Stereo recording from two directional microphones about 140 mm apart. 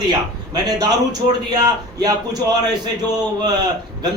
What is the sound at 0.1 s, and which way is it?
A man's voice, 30° right (ahead or behind).